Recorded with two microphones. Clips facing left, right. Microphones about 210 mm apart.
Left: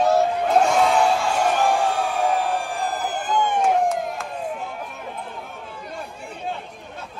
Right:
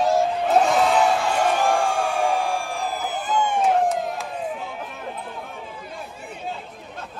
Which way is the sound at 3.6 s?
Centre (ahead or behind).